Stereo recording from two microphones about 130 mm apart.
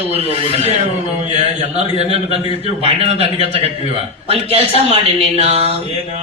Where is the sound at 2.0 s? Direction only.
50° right (ahead or behind).